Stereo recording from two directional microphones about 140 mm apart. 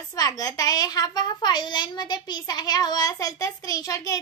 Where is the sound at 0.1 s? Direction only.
25° left (ahead or behind).